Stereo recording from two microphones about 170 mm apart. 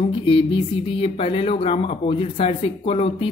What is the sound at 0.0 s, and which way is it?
Speech, 35° left (ahead or behind).